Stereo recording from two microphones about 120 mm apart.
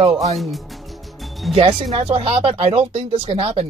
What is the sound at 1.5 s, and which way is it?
Speech, 50° right (ahead or behind).